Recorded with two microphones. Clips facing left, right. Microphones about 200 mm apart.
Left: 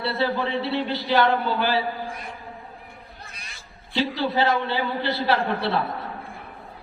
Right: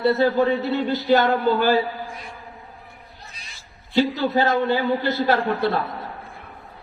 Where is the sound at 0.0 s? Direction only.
45° right (ahead or behind).